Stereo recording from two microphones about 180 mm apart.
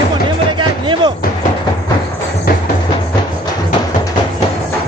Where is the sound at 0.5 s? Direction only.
25° right (ahead or behind).